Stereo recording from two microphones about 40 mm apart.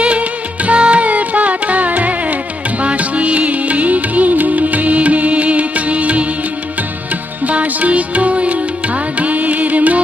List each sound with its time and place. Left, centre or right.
0.0 s music: right
7.4 s music: right